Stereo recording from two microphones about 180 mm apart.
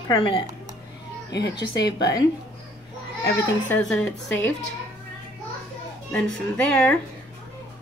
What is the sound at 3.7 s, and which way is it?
Speech, 10° left (ahead or behind).